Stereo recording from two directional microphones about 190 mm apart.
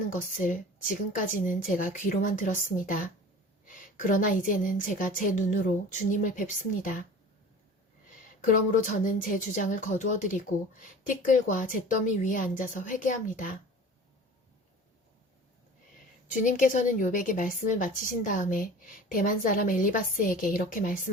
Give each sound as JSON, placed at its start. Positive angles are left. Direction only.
{"t": 0.1, "sound": "a woman's voice", "side_deg": 45}
{"t": 8.7, "sound": "a woman's voice", "side_deg": 45}
{"t": 16.3, "sound": "a woman's voice", "side_deg": 40}